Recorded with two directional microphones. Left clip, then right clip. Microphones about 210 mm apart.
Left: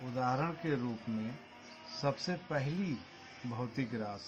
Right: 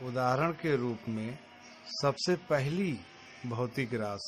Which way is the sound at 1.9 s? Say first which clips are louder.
Right 6 dB; 50° right (ahead or behind).